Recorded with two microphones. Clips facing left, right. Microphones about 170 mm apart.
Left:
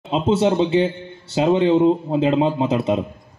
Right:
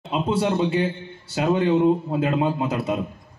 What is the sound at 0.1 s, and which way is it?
A child's voice, 25° left (ahead or behind).